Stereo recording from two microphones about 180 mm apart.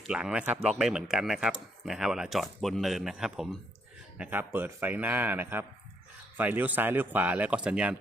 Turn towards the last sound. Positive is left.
turn(degrees=-5)  # may be behind; listen again after turning